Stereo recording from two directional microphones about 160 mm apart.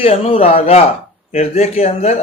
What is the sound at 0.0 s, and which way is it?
Speech, 35° left (ahead or behind).